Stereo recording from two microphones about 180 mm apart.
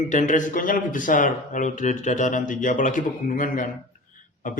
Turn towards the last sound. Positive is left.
turn(degrees=45)  # may be behind; listen again after turning